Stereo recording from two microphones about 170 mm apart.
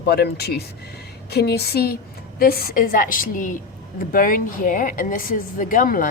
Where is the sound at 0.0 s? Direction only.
70° left (ahead or behind).